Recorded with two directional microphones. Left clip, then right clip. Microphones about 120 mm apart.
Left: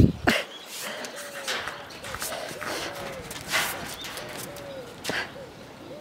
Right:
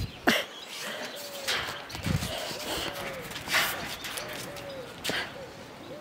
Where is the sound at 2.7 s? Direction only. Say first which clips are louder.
Left 2 dB; centre (ahead or behind).